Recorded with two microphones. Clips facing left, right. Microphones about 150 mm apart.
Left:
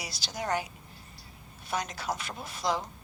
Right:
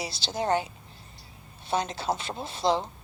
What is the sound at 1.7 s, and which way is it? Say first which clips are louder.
A woman's voice: right 5 dB; 30° right (ahead or behind).